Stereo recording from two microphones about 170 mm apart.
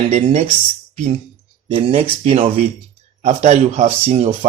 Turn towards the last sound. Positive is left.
turn(degrees=-45)  # may be behind; listen again after turning